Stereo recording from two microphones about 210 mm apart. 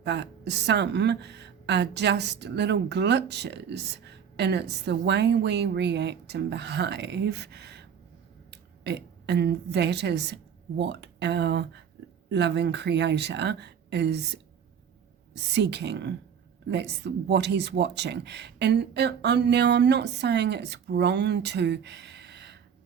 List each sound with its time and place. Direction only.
0.0 s speech: 55° right (ahead or behind)
15.5 s speech: 55° right (ahead or behind)